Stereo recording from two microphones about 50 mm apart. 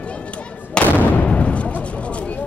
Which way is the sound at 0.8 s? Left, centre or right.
Left.